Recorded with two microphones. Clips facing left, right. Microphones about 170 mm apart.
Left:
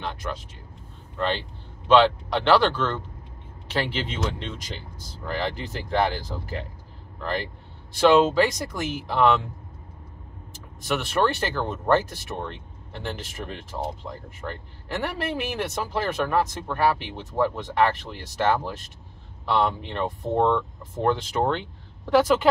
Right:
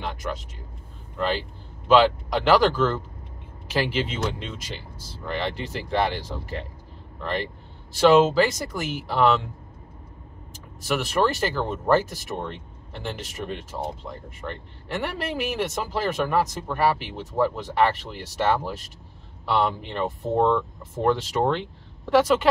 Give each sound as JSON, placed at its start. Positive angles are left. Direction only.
{"t": 1.1, "sound": "speech", "side_deg": -5}
{"t": 10.8, "sound": "speech", "side_deg": -5}